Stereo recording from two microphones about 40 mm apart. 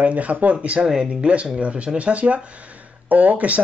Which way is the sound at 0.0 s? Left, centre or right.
Right.